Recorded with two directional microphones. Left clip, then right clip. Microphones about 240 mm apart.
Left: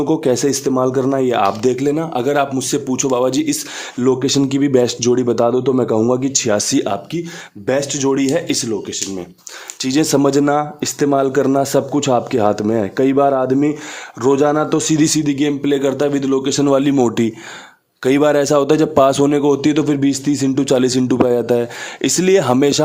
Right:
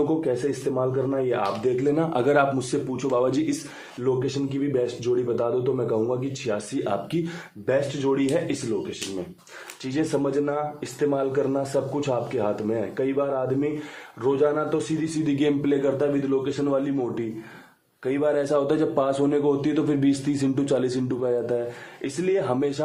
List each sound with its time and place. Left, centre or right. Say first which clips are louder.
0.3 s speech: left 9 dB; left
2.0 s a man's voice: left 4 dB; left
2.9 s a man's voice: left 7 dB; left
4.0 s speech: left 10 dB; left
6.8 s a man's voice: left 5 dB; left
9.8 s speech: left 11 dB; left
15.2 s a man's voice: left 6 dB; left
22.0 s speech: left 11 dB; left